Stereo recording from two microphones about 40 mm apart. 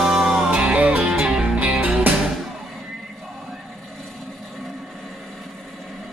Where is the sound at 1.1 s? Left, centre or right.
Right.